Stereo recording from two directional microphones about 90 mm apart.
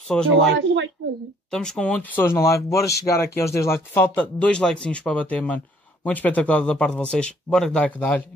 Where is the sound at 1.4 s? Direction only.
5° left (ahead or behind).